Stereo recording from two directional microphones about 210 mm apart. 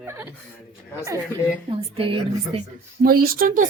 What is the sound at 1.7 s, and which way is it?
Speech, 25° right (ahead or behind).